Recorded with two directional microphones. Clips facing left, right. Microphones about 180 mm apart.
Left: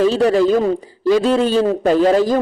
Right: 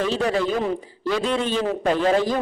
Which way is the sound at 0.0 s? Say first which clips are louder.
Left 8 dB; 35° left (ahead or behind).